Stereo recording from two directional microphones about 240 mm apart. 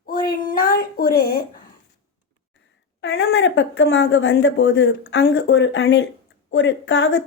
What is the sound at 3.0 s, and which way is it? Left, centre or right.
Speech, left.